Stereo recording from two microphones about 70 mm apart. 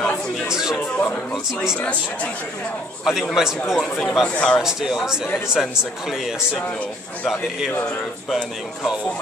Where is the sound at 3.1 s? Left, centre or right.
Centre.